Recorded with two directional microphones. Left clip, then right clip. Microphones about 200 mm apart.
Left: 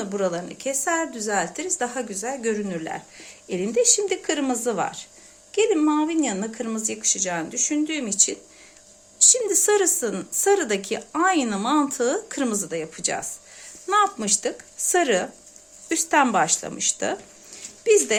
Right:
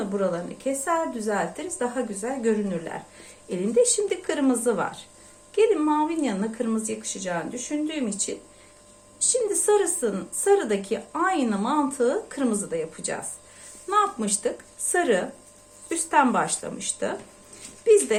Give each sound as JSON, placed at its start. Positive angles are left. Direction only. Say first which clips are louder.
{"t": 0.1, "sound": "a woman's voice", "louder": "left 3 dB", "side_deg": 55}